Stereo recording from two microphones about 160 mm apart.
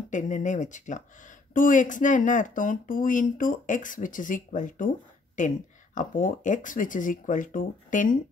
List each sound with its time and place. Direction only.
0.1 s speech: 50° left (ahead or behind)